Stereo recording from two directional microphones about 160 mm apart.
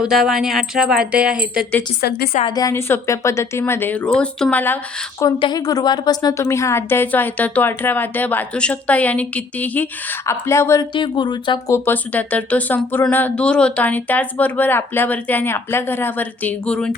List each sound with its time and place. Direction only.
0.0 s speech: 5° right (ahead or behind)
2.0 s a woman's voice: 85° left
2.5 s a woman's voice: 20° left (ahead or behind)
5.4 s a woman's voice: 25° left (ahead or behind)
10.9 s speech: 30° left (ahead or behind)
11.7 s a woman's voice: 10° left (ahead or behind)